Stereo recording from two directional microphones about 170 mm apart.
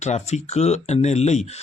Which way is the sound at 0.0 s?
40° left (ahead or behind).